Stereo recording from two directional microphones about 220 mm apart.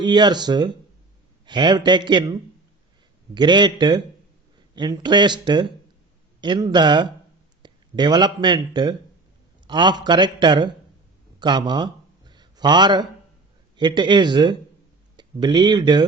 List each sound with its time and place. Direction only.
0.0 s a man's voice: 20° right (ahead or behind)
11.3 s a sound: 20° right (ahead or behind)
13.7 s a man's voice: 20° right (ahead or behind)